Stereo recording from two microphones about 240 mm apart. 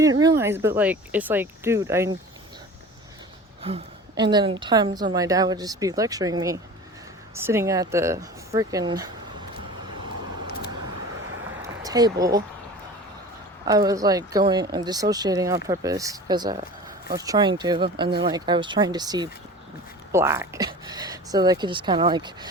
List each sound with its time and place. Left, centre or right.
0.2 s speech: centre
4.2 s speech: centre
11.6 s a sound: centre
13.7 s speech: centre